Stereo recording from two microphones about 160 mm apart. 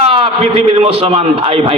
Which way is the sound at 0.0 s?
35° right (ahead or behind).